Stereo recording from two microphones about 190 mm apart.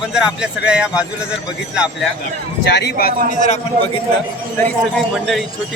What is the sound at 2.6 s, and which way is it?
Speech, 65° left (ahead or behind).